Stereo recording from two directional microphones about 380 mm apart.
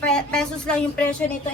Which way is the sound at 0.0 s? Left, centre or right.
Centre.